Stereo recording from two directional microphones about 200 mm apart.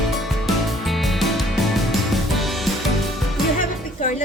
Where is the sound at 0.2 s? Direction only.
Centre (ahead or behind).